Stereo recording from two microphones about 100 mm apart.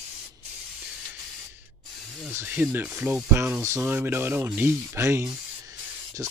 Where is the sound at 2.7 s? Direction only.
20° right (ahead or behind).